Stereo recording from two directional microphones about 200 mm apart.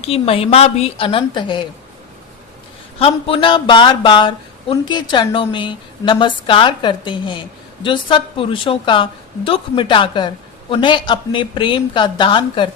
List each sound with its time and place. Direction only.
0.0 s speech: 30° left (ahead or behind)
3.0 s speech: 25° left (ahead or behind)